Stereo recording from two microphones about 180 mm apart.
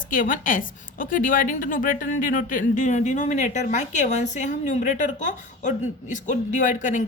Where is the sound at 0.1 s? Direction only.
50° left (ahead or behind).